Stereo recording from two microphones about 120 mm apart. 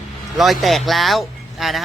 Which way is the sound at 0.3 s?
Centre (ahead or behind).